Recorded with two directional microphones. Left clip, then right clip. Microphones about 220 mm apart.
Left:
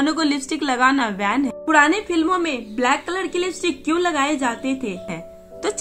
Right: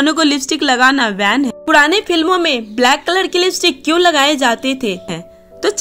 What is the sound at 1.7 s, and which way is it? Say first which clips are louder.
A woman's voice: right 5 dB; 45° right (ahead or behind).